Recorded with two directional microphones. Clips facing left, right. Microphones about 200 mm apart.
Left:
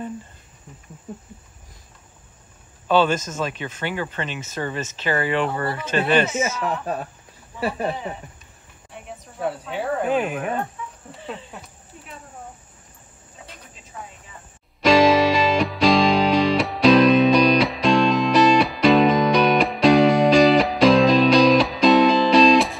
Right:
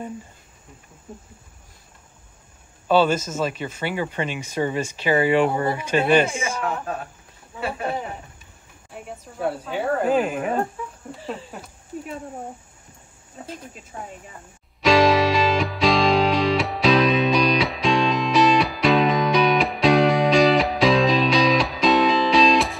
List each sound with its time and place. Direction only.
2.9 s speech: 10° right (ahead or behind)
8.9 s speech: centre (ahead or behind)
13.9 s speech: 30° right (ahead or behind)
14.8 s music: centre (ahead or behind)